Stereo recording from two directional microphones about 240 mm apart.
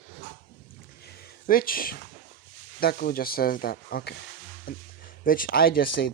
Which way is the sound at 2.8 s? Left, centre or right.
Left.